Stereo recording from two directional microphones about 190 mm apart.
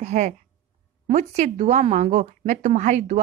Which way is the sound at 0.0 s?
40° right (ahead or behind).